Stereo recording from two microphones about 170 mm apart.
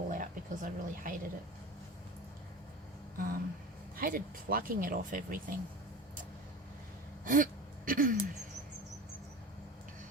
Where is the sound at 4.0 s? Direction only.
60° right (ahead or behind).